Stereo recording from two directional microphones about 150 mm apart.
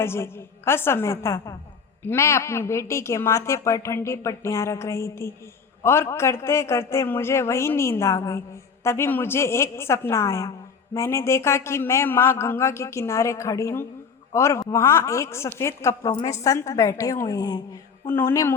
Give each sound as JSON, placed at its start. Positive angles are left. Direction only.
{"t": 0.0, "sound": "a man's voice", "side_deg": 15}